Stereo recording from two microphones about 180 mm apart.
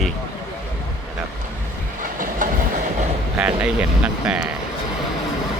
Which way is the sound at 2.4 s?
45° right (ahead or behind).